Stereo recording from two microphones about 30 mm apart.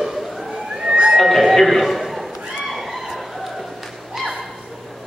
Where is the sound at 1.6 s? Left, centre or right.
Centre.